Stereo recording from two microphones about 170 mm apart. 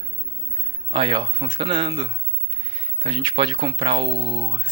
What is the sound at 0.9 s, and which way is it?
Speech, 30° right (ahead or behind).